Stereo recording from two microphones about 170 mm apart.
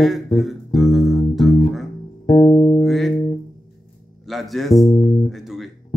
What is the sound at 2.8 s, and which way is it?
Music, centre (ahead or behind).